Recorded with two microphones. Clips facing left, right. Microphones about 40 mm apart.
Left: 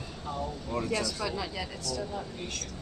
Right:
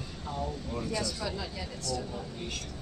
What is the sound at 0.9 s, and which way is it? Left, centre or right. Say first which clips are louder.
Speech: left 1 dB; left.